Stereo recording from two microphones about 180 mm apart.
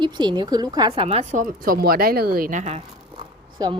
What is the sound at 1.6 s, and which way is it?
Speech, 55° right (ahead or behind).